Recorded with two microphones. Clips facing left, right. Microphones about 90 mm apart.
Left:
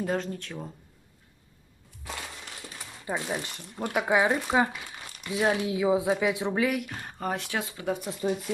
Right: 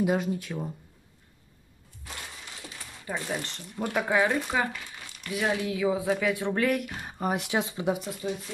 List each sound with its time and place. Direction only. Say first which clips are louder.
0.0 s speech: right 3 dB; 10° right (ahead or behind)
3.1 s speech: left 1 dB; 15° left (ahead or behind)
6.6 s speech: right 1 dB; centre (ahead or behind); by 7.9 s 20° right (ahead or behind)
8.2 s speech: left 5 dB; 40° left (ahead or behind)